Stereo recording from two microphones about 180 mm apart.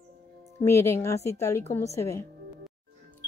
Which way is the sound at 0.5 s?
15° left (ahead or behind).